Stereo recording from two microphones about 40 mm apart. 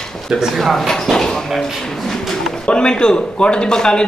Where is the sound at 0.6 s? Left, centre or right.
Centre.